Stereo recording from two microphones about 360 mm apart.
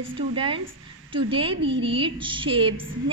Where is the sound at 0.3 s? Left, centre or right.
Centre.